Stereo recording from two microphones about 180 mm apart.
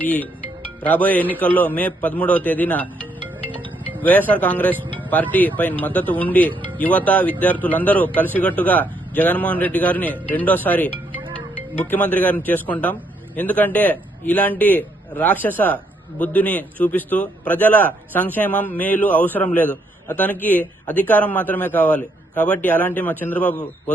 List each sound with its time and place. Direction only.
0.0 s a man's voice: 10° left (ahead or behind)
3.2 s music: 30° right (ahead or behind)
4.0 s a man's voice: 10° left (ahead or behind)
11.9 s a man's voice: 10° left (ahead or behind)